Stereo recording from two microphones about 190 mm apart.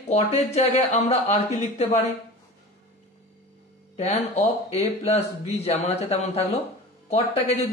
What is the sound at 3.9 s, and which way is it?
Speech, 35° left (ahead or behind).